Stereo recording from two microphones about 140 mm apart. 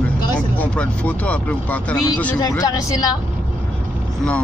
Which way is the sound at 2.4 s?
25° left (ahead or behind).